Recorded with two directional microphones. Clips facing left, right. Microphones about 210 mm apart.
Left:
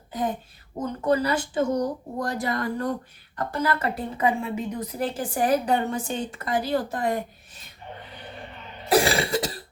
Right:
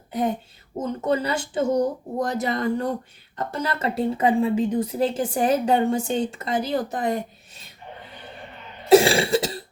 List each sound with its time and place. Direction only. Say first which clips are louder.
0.8 s a woman's voice: even; 25° right (ahead or behind)
8.9 s a woman's voice: right 6 dB; 25° right (ahead or behind)